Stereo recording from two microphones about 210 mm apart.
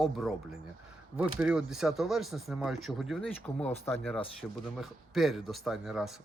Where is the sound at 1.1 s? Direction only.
5° right (ahead or behind).